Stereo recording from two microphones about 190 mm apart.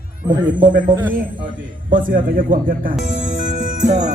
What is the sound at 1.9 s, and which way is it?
Speech, 45° right (ahead or behind).